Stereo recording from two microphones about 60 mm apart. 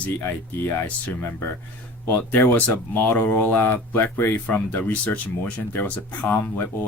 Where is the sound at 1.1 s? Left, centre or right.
Left.